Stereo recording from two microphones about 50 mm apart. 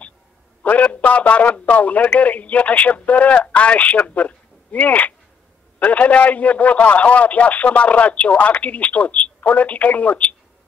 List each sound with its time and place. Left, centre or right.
0.7 s a man's voice: left